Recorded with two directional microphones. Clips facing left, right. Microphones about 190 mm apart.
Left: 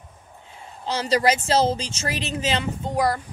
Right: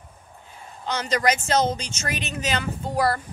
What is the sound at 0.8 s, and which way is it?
Speech, 30° left (ahead or behind).